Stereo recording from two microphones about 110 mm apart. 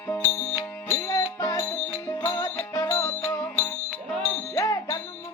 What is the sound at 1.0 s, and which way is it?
Music, 35° left (ahead or behind).